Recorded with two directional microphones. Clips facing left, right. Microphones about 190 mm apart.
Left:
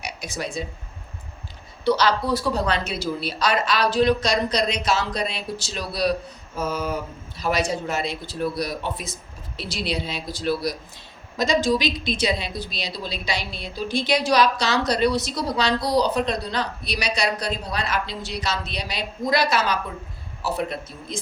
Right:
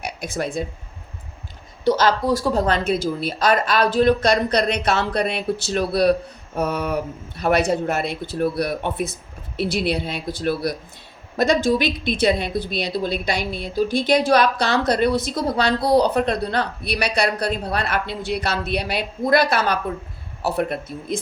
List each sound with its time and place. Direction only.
0.0 s speech: 55° right (ahead or behind)
1.8 s a woman's voice: 45° right (ahead or behind)